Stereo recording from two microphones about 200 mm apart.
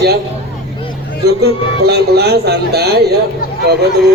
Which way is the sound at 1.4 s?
55° right (ahead or behind).